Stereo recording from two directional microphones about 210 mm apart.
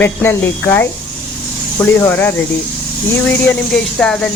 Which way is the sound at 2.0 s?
10° left (ahead or behind).